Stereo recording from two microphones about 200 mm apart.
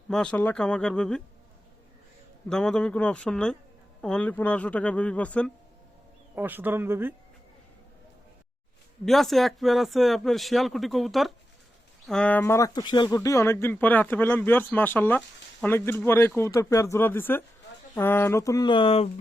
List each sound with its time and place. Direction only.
0.1 s speech: 5° left (ahead or behind)
2.5 s speech: 5° left (ahead or behind)
6.3 s speech: 10° right (ahead or behind)
9.0 s speech: centre (ahead or behind); by 19.0 s 25° left (ahead or behind)